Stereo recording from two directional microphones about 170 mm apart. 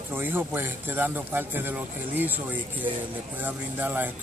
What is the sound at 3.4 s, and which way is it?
Speech, 10° right (ahead or behind).